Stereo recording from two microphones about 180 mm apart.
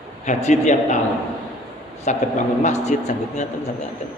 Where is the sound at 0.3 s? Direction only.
40° left (ahead or behind).